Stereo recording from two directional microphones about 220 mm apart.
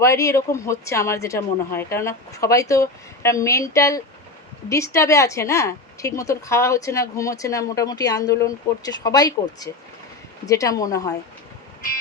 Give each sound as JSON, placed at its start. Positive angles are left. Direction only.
{"t": 0.0, "sound": "a woman's voice", "side_deg": 15}